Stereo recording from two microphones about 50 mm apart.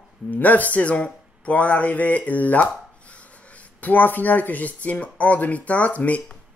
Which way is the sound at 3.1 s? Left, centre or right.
Left.